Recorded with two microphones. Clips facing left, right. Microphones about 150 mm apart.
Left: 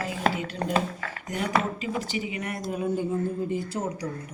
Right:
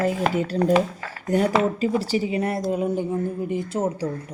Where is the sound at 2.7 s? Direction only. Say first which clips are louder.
Right 4 dB; 20° right (ahead or behind).